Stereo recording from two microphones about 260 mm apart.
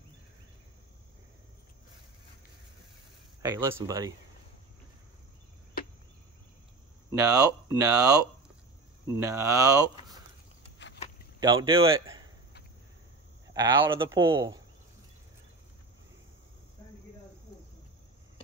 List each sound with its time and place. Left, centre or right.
3.4 s speech: centre
7.1 s speech: centre
11.3 s speech: centre
13.5 s speech: centre